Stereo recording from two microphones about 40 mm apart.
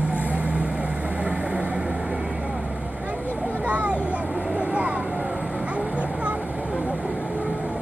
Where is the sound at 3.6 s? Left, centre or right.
Right.